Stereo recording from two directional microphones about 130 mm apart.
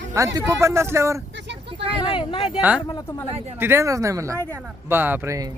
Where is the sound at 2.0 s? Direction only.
40° left (ahead or behind).